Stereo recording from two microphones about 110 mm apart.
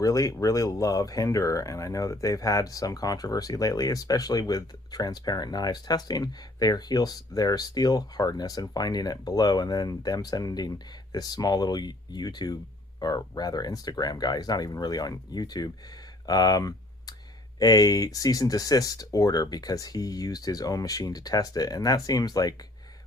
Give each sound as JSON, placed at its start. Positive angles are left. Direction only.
{"t": 0.0, "sound": "speech", "side_deg": 30}
{"t": 16.2, "sound": "a sound", "side_deg": 35}
{"t": 17.6, "sound": "speech", "side_deg": 35}